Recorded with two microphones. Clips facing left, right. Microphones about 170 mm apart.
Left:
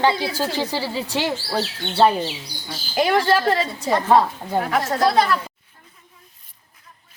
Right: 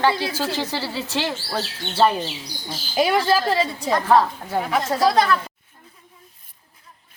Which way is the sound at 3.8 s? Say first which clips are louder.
Left 1 dB; 5° left (ahead or behind).